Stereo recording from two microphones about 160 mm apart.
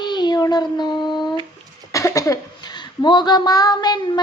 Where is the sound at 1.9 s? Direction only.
20° left (ahead or behind).